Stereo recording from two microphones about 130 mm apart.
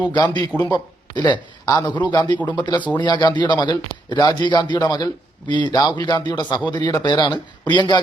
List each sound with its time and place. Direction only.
0.1 s a man's voice: 35° left (ahead or behind)